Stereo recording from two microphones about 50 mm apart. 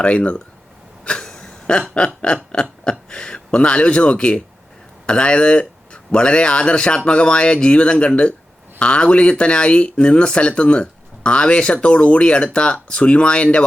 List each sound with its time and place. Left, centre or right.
0.0 s speech: left
1.0 s a sound: centre
3.1 s speech: centre